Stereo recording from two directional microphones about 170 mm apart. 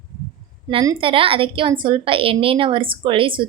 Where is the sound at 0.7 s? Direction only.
30° right (ahead or behind).